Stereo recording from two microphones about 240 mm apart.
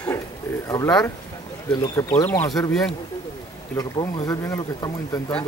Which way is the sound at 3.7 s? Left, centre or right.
Centre.